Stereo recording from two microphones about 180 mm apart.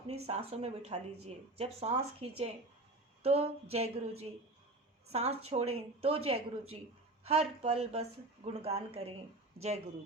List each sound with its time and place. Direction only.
0.1 s speech: 35° right (ahead or behind)